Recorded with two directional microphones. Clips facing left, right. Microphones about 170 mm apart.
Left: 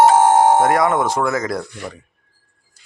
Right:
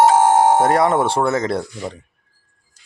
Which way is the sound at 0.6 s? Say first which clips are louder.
Even; 35° right (ahead or behind).